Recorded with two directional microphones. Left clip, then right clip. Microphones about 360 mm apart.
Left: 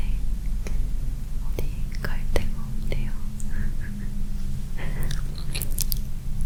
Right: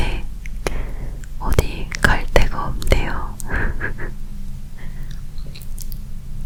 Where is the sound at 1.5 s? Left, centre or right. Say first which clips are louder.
Right 13 dB; right.